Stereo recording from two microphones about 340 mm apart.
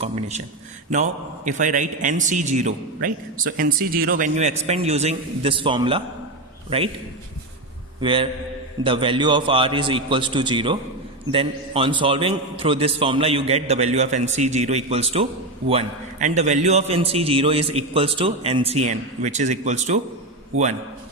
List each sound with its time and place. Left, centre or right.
0.0 s a man's voice: centre
8.0 s a man's voice: centre